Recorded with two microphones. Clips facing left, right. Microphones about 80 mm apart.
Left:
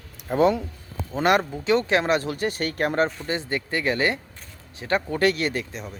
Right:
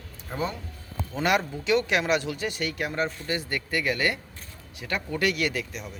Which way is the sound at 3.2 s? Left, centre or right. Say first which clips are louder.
Left 3 dB; left.